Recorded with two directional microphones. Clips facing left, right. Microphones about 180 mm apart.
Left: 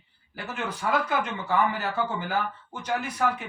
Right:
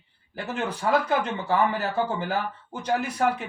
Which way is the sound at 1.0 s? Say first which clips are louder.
Right 3 dB; 35° right (ahead or behind).